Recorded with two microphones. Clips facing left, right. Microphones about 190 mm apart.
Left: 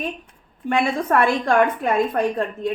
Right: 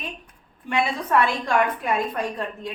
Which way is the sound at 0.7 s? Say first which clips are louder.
Left 3 dB; 50° left (ahead or behind).